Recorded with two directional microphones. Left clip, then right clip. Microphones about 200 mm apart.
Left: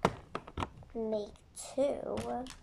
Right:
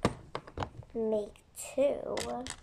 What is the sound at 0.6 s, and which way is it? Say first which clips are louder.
Speech: right 4 dB; 5° right (ahead or behind).